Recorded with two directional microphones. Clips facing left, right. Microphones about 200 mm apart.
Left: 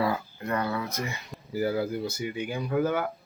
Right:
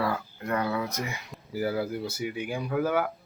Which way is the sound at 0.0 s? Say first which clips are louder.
Left 2 dB; 10° left (ahead or behind).